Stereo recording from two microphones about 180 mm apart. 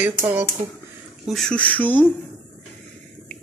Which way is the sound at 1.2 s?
Centre (ahead or behind).